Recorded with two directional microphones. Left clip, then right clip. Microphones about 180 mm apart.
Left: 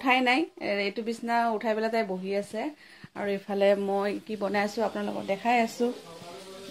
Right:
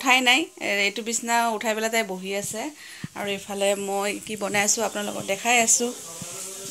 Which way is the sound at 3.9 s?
10° left (ahead or behind).